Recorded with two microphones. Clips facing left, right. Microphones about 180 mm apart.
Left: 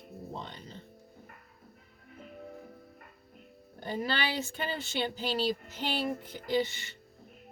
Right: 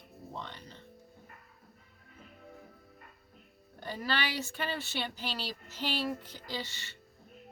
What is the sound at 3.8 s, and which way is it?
Speech, 20° left (ahead or behind).